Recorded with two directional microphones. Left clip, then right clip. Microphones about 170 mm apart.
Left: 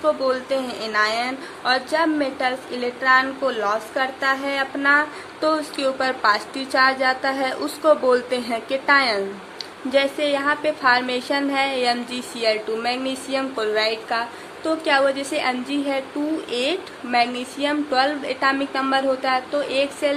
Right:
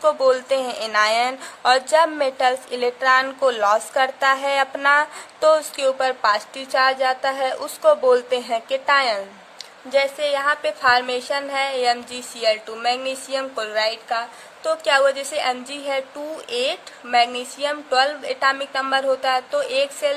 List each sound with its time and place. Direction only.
0.0 s a woman's voice: 45° right (ahead or behind)